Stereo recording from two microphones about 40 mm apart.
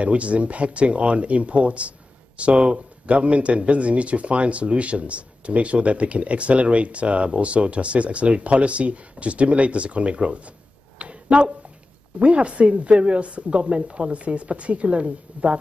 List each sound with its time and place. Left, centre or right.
0.0 s speech: right
11.0 s a sound: right
12.2 s speech: right